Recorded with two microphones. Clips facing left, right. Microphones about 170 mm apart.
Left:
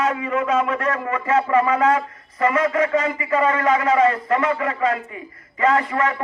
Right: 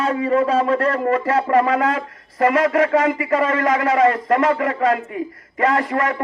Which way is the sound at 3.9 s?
50° right (ahead or behind).